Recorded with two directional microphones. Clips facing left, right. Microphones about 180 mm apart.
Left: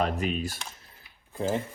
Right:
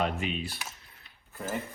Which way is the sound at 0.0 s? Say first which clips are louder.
Left 3 dB; 40° left (ahead or behind).